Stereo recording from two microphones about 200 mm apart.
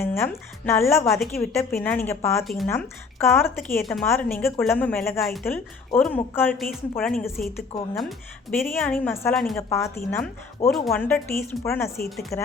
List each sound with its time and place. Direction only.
0.0 s speech: 10° left (ahead or behind)
1.0 s speech: centre (ahead or behind)
1.4 s speech: 10° left (ahead or behind)
2.4 s speech: centre (ahead or behind)
2.6 s speech: 10° left (ahead or behind)
5.2 s speech: centre (ahead or behind)
8.5 s speech: 10° left (ahead or behind)
9.6 s speech: 15° left (ahead or behind)
10.7 s speech: centre (ahead or behind)